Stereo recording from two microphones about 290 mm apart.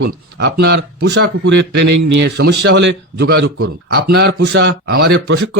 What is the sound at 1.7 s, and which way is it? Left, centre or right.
Speech, right.